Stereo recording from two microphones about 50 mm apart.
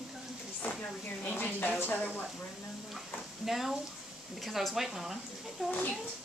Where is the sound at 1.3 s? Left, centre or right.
Left.